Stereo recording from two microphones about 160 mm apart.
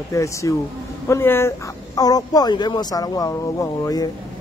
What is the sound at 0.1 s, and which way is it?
A man's voice, 20° left (ahead or behind).